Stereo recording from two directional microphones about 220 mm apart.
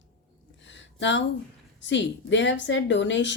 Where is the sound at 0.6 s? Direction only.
55° left (ahead or behind).